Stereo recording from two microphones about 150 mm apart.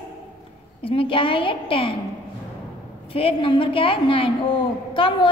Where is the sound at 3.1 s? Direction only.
40° left (ahead or behind).